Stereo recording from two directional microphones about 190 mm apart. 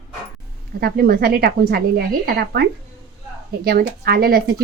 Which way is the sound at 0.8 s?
55° right (ahead or behind).